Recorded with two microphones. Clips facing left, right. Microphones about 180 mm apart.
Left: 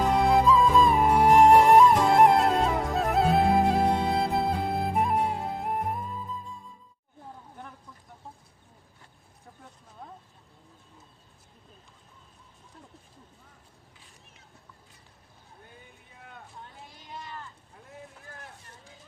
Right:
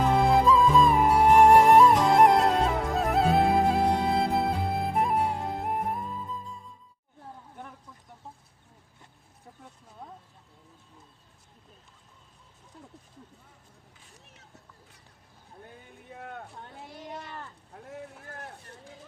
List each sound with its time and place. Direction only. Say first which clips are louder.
0.1 s music: even; centre (ahead or behind)
16.1 s vehicle: right 6 dB; 60° right (ahead or behind)
17.7 s run: right 6 dB; 65° right (ahead or behind)
18.3 s vehicle: right 4 dB; 60° right (ahead or behind)